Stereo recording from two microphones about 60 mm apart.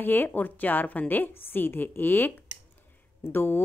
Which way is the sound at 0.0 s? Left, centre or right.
Left.